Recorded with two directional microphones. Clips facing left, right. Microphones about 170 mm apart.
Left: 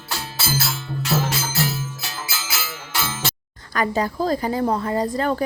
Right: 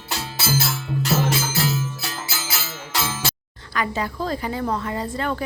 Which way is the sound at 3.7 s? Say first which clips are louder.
Left 3 dB; 40° left (ahead or behind).